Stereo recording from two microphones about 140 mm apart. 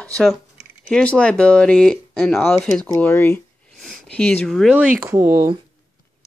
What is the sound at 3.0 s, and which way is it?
Speech, 15° left (ahead or behind).